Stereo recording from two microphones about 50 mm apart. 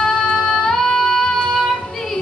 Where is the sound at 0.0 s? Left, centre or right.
Centre.